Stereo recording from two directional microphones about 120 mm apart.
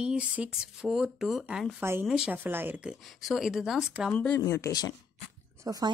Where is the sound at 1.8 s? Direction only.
20° right (ahead or behind).